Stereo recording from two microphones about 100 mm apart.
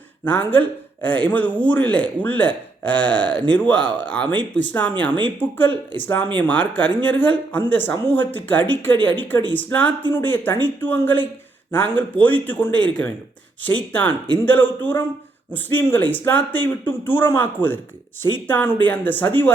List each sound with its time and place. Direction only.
0.3 s speech: 15° left (ahead or behind)